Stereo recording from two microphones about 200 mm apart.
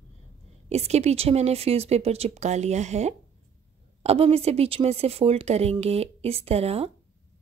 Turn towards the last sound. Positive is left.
turn(degrees=-30)  # may be behind; listen again after turning